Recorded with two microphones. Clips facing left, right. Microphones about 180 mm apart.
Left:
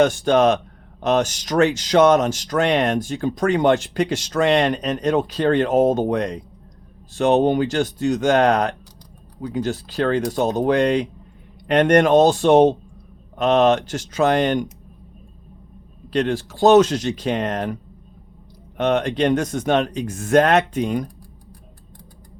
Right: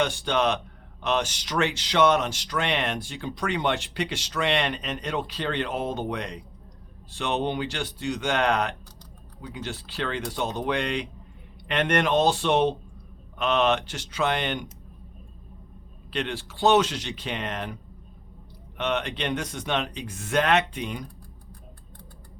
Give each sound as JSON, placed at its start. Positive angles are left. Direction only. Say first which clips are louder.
{"t": 0.0, "sound": "speech", "louder": "left 9 dB", "side_deg": 45}
{"t": 16.1, "sound": "speech", "louder": "left 10 dB", "side_deg": 40}
{"t": 18.8, "sound": "speech", "louder": "left 9 dB", "side_deg": 45}